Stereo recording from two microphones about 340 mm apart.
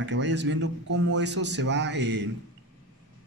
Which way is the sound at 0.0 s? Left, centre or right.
Right.